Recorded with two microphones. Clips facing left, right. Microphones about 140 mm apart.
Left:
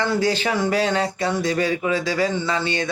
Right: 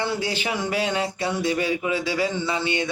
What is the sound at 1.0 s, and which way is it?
Speech, 40° left (ahead or behind).